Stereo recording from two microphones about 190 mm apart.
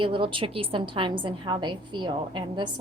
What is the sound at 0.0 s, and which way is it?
A woman's voice, 25° right (ahead or behind).